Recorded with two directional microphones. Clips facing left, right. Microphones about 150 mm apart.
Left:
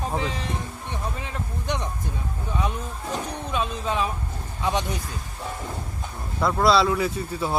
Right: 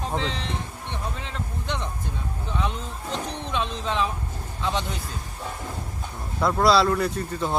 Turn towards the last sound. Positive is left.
turn(degrees=5)  # may be behind; listen again after turning